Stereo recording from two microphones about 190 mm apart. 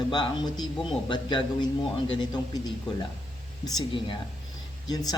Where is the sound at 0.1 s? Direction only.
25° left (ahead or behind).